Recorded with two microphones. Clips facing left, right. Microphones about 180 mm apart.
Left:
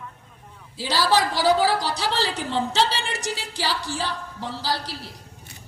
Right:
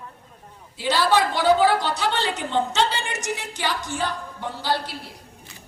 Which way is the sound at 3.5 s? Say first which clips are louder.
Even; 35° left (ahead or behind).